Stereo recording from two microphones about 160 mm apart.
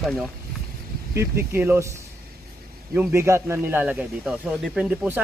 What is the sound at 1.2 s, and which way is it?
Speech, 15° right (ahead or behind).